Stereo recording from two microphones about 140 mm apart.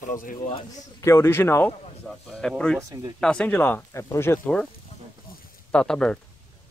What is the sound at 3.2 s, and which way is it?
Speech, 5° left (ahead or behind).